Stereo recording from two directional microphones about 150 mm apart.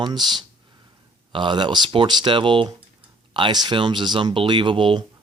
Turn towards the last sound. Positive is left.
turn(degrees=-35)  # may be behind; listen again after turning